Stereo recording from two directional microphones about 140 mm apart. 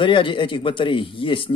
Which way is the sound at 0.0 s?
35° left (ahead or behind).